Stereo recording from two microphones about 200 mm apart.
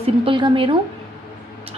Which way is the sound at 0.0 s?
25° right (ahead or behind).